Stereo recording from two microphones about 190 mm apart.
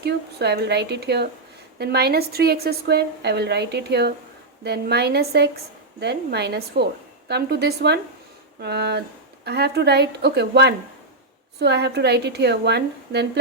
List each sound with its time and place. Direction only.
0.0 s a woman's voice: 60° right (ahead or behind)